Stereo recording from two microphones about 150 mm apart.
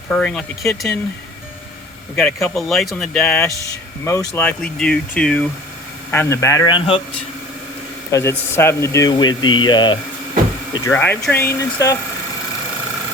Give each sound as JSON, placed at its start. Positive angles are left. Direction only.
{"t": 0.1, "sound": "speech", "side_deg": 5}
{"t": 2.1, "sound": "speech", "side_deg": 5}
{"t": 4.0, "sound": "speech", "side_deg": 20}
{"t": 4.4, "sound": "speech", "side_deg": 10}
{"t": 6.1, "sound": "speech", "side_deg": 15}
{"t": 6.7, "sound": "speech", "side_deg": 35}
{"t": 8.1, "sound": "speech", "side_deg": 15}
{"t": 10.8, "sound": "speech", "side_deg": 15}